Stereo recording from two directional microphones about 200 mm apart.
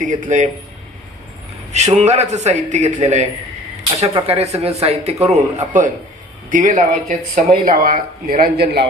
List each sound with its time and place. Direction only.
0.0 s speech: 40° right (ahead or behind)
1.7 s speech: 35° right (ahead or behind); by 8.9 s 55° right (ahead or behind)